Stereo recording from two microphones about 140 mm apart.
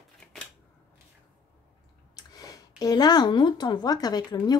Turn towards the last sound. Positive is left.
turn(degrees=30)  # may be behind; listen again after turning